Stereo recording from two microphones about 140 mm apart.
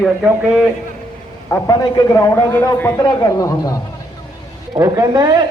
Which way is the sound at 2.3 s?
15° left (ahead or behind).